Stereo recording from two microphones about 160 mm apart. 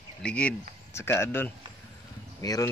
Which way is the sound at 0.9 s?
15° left (ahead or behind).